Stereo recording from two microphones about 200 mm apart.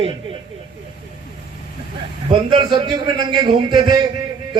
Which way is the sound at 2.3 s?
20° right (ahead or behind).